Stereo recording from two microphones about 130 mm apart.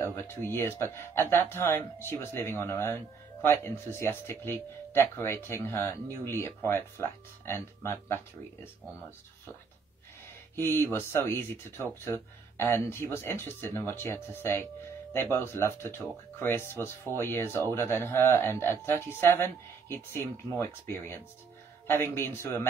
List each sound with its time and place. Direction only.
0.0 s speech: 20° left (ahead or behind)
10.5 s speech: 20° left (ahead or behind)